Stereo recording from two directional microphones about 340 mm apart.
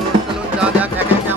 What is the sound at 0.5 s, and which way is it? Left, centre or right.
Music, centre.